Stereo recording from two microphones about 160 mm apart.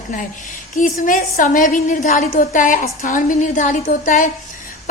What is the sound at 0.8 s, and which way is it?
A woman's voice, 50° left (ahead or behind).